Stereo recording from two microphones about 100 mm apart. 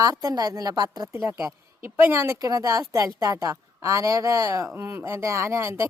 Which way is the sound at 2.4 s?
35° right (ahead or behind).